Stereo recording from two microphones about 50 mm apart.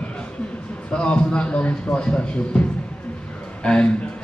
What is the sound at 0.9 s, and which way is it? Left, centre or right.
A man's voice, centre.